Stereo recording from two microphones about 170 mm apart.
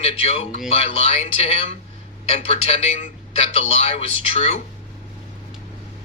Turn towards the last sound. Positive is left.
turn(degrees=35)  # may be behind; listen again after turning